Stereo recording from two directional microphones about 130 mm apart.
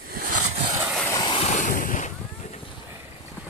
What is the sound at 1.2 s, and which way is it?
Waves, 40° left (ahead or behind).